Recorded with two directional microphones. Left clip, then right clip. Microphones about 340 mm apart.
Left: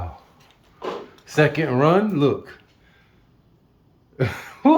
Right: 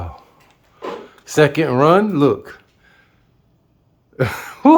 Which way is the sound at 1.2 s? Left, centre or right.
Centre.